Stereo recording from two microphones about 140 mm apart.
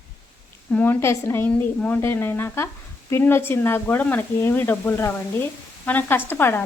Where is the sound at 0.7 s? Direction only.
15° left (ahead or behind).